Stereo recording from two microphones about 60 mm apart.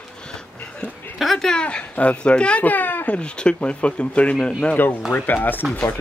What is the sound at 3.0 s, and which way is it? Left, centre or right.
Speech, centre.